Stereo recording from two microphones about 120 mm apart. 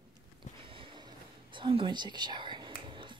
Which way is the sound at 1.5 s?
40° right (ahead or behind).